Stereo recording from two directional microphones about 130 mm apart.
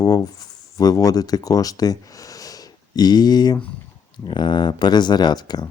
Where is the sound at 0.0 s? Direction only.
30° left (ahead or behind).